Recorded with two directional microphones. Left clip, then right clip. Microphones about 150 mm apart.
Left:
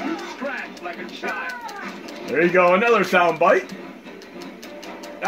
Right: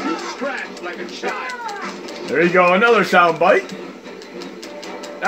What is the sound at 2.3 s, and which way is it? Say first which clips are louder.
Speech: right 2 dB; 50° right (ahead or behind).